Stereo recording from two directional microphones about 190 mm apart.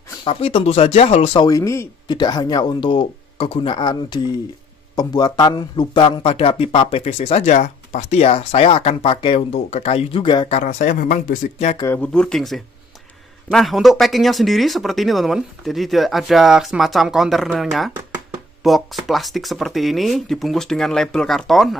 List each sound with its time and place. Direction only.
0.2 s speech: 30° left (ahead or behind)
1.5 s speech: 15° left (ahead or behind)
10.6 s speech: 40° left (ahead or behind)
11.8 s speech: 10° left (ahead or behind)